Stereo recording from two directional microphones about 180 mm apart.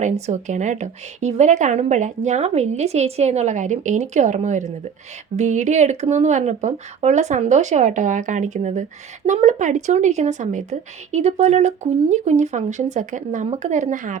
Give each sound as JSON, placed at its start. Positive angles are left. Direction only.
{"t": 0.0, "sound": "speech", "side_deg": -40}